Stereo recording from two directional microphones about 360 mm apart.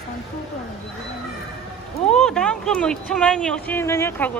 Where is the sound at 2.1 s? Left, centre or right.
Centre.